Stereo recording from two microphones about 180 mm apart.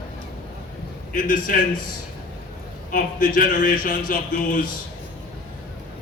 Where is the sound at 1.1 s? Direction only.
50° left (ahead or behind).